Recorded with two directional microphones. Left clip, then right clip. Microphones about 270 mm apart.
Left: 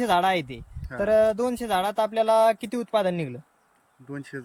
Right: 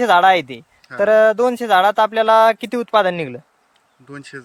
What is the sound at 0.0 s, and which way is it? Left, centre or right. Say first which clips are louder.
Speech: right 10 dB; centre.